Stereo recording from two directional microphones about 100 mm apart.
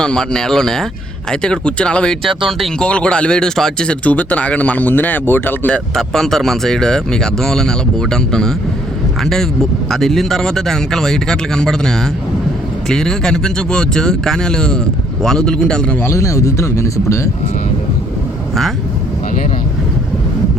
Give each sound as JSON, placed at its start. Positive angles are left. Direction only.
{"t": 0.0, "sound": "speech", "side_deg": 5}
{"t": 5.9, "sound": "speech", "side_deg": 5}
{"t": 16.0, "sound": "speech", "side_deg": 30}